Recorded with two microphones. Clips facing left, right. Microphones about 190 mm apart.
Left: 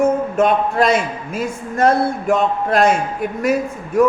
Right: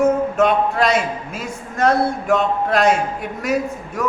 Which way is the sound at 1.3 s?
55° left (ahead or behind).